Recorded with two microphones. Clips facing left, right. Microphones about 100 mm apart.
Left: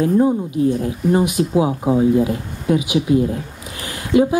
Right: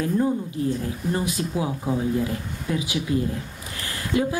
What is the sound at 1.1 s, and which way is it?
Speech, 20° left (ahead or behind).